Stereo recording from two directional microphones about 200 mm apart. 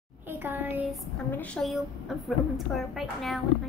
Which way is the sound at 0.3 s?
10° right (ahead or behind).